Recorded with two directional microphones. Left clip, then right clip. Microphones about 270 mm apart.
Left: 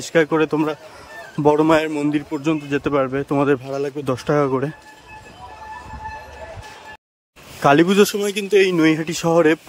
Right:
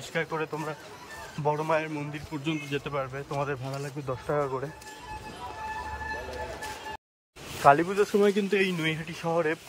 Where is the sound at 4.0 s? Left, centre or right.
Left.